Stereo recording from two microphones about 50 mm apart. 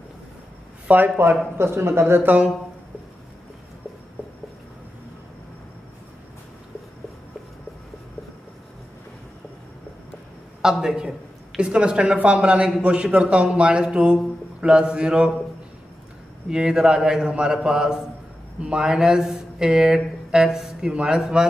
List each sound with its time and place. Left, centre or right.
0.8 s speech: right
1.6 s speech: right
2.2 s speech: right
10.6 s a man's voice: centre
16.4 s speech: centre